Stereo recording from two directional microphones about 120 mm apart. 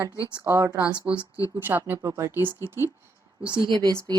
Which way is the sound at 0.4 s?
25° right (ahead or behind).